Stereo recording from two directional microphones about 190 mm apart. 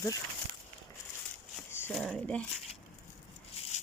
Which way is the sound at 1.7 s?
10° left (ahead or behind).